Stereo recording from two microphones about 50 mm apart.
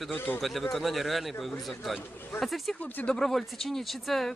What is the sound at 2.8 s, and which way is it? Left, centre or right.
Speech, left.